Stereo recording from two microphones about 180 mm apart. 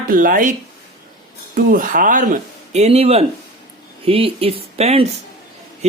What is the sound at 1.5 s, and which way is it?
Speech, 50° right (ahead or behind).